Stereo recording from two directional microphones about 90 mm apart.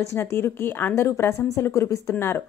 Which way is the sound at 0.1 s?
30° left (ahead or behind).